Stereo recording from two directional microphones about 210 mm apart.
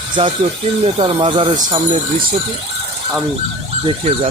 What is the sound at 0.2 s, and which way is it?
Speech, 25° right (ahead or behind).